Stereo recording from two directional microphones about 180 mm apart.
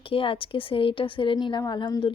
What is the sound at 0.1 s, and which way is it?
A woman's voice, 30° left (ahead or behind).